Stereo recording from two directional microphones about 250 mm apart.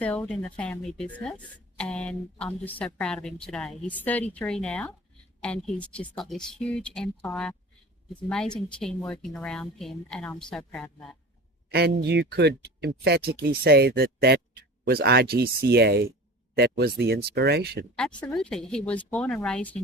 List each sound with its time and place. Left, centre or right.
0.0 s a woman's voice: centre
11.7 s speech: right
18.2 s a woman's voice: centre